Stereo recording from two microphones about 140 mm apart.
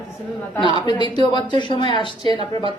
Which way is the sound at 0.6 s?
35° left (ahead or behind).